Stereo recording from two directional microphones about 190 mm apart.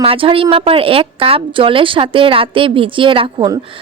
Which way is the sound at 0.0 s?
30° right (ahead or behind).